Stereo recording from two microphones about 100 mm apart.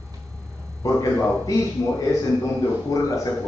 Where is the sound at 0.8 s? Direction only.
35° left (ahead or behind).